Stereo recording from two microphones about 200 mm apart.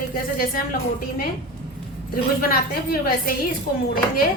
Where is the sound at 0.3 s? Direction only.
45° left (ahead or behind).